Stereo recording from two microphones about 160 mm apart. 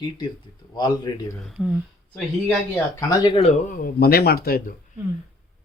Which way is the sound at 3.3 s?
40° left (ahead or behind).